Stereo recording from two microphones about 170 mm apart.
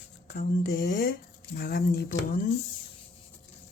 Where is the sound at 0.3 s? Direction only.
65° left (ahead or behind).